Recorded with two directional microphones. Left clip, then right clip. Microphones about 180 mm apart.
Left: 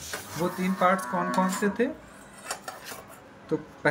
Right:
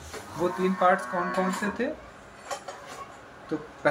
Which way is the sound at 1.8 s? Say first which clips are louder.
Left 4 dB; 40° left (ahead or behind).